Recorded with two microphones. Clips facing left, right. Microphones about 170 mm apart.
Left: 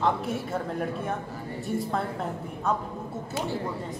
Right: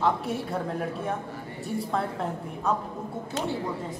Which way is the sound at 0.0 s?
Centre (ahead or behind).